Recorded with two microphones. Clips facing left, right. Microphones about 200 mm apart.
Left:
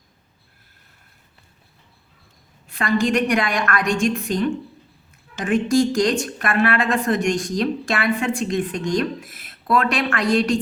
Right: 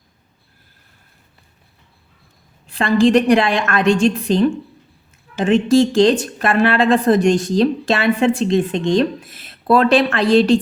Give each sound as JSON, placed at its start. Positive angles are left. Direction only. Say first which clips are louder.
{"t": 2.6, "sound": "a woman's voice", "louder": "right 6 dB", "side_deg": -30}